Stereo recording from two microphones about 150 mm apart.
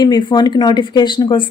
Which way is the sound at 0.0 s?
30° left (ahead or behind).